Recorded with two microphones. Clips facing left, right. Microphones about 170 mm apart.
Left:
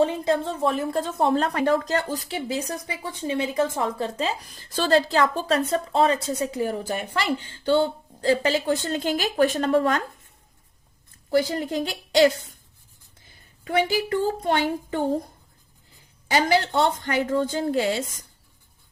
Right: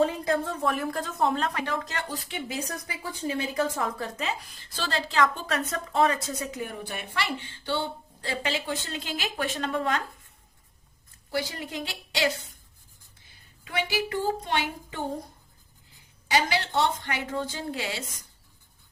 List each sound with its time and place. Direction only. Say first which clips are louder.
0.0 s a woman's voice: left 3 dB; 25° left (ahead or behind); by 10.0 s 40° left (ahead or behind)
11.3 s speech: left 9 dB; 45° left (ahead or behind)
13.7 s speech: left 7 dB; 45° left (ahead or behind)
16.3 s speech: left 5 dB; 45° left (ahead or behind)